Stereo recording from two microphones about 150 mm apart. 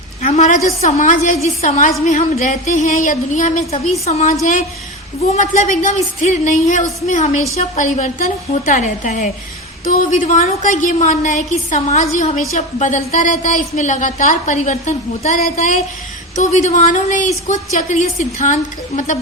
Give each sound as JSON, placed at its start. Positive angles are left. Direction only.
{"t": 0.2, "sound": "a woman's voice", "side_deg": 55}
{"t": 4.0, "sound": "speech", "side_deg": 45}
{"t": 5.3, "sound": "a woman's voice", "side_deg": 60}